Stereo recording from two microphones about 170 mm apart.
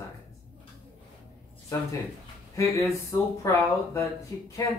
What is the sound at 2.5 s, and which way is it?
Speech, 20° left (ahead or behind).